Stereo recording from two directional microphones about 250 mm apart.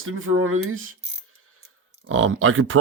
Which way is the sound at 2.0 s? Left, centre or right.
Right.